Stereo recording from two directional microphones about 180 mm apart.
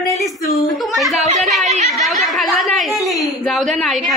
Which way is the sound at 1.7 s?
40° right (ahead or behind).